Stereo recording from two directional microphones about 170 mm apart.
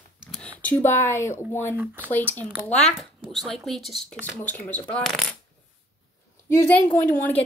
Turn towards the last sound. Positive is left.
turn(degrees=10)  # may be behind; listen again after turning